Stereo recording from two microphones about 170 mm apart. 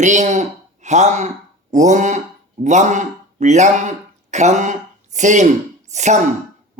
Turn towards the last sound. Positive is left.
turn(degrees=-45)  # may be behind; listen again after turning